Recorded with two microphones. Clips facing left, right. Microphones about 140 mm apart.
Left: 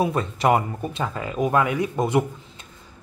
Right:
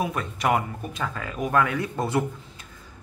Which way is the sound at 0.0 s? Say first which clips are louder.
Left 5 dB; 30° left (ahead or behind).